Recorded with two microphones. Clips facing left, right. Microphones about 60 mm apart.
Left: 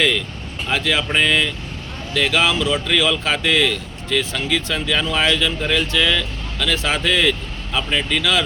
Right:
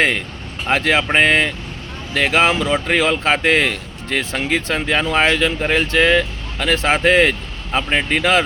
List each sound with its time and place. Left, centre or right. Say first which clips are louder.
0.7 s speech: right 4 dB; right